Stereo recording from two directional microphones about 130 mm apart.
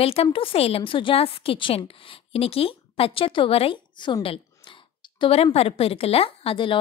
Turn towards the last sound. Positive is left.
turn(degrees=40)  # may be behind; listen again after turning